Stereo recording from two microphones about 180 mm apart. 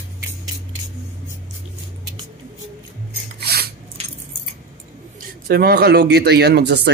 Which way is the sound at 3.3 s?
65° right (ahead or behind).